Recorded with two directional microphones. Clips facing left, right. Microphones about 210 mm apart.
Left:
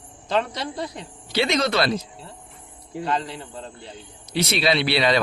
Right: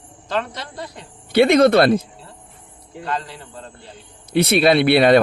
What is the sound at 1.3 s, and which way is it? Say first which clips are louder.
Speech: right 10 dB; 55° right (ahead or behind).